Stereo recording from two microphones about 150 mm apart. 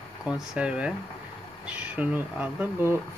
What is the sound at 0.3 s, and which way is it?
Speech, 5° right (ahead or behind).